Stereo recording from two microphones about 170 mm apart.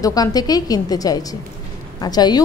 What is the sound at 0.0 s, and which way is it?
A woman's voice, 20° left (ahead or behind).